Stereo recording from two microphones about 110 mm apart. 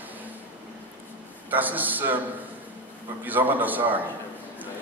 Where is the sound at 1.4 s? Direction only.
15° right (ahead or behind).